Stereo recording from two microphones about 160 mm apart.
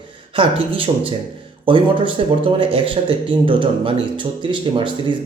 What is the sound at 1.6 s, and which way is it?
Speech, 30° right (ahead or behind).